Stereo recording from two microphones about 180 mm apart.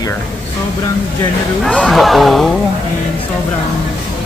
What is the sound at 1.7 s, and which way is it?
Speech, 5° left (ahead or behind).